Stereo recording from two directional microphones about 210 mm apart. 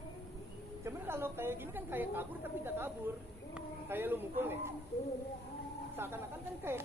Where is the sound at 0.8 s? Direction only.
10° right (ahead or behind).